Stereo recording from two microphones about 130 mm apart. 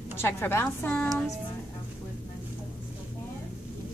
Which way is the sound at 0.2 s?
20° left (ahead or behind).